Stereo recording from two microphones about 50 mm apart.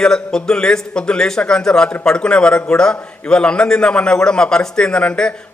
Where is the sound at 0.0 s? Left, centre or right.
Centre.